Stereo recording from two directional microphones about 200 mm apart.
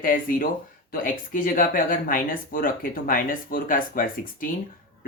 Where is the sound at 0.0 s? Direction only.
45° left (ahead or behind).